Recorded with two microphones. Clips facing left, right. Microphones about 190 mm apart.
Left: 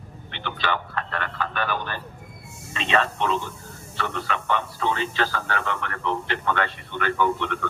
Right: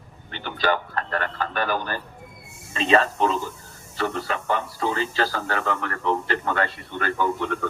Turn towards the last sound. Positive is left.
turn(degrees=-40)  # may be behind; listen again after turning